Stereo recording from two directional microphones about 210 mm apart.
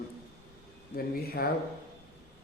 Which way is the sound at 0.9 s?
45° left (ahead or behind).